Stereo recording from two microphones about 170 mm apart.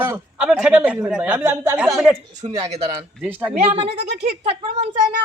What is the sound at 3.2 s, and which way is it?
Speech, 10° right (ahead or behind).